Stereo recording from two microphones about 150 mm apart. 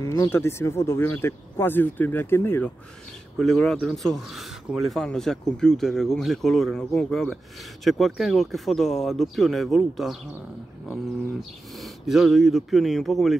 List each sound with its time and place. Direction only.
0.0 s speech: 25° left (ahead or behind)
3.3 s speech: centre (ahead or behind)
11.8 s speech: centre (ahead or behind)